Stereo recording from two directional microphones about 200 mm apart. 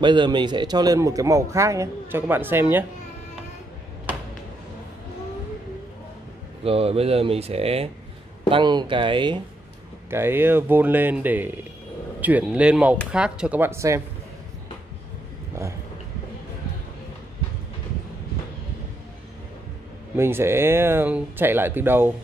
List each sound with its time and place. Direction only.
0.0 s a man's voice: 25° right (ahead or behind)
6.6 s speech: 30° right (ahead or behind)
10.0 s a man's voice: 10° right (ahead or behind)
20.2 s a man's voice: 10° right (ahead or behind)